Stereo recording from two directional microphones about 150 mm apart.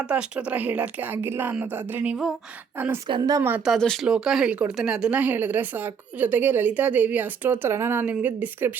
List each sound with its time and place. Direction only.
0.0 s speech: 5° right (ahead or behind)
3.1 s speech: 25° right (ahead or behind)
3.6 s speech: centre (ahead or behind)